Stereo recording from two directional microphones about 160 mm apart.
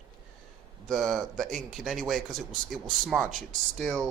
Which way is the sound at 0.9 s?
Centre (ahead or behind).